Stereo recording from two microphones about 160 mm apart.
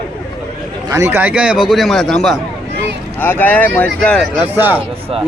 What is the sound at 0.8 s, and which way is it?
Speech, 15° right (ahead or behind).